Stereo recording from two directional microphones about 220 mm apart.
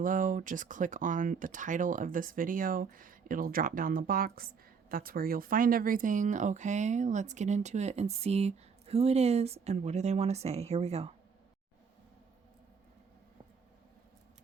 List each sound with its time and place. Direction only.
0.0 s speech: 35° right (ahead or behind)